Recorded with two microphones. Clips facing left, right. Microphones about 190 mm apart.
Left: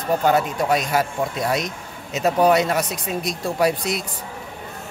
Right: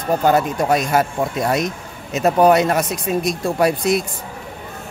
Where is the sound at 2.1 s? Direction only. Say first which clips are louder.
Right 3 dB; 50° right (ahead or behind).